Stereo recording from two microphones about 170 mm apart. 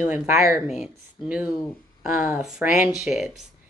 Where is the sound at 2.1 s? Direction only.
10° right (ahead or behind).